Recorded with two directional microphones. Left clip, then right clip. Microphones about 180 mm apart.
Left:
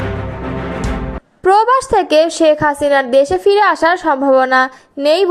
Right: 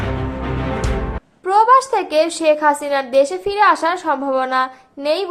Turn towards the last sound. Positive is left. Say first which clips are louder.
# left 7 dB
turn(degrees=40)  # may be behind; listen again after turning